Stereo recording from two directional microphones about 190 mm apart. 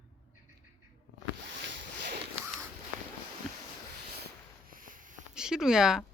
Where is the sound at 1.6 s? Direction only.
65° right (ahead or behind).